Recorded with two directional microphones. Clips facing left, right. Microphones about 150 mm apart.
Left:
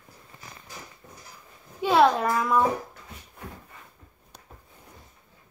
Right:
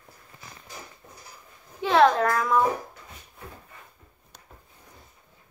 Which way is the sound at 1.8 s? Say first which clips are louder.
Right 1 dB; 10° left (ahead or behind).